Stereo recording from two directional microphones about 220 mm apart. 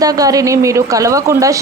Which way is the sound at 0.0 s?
15° right (ahead or behind).